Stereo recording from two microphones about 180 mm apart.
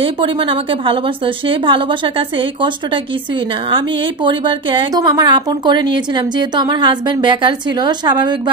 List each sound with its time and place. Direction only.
0.0 s a woman's voice: 30° right (ahead or behind)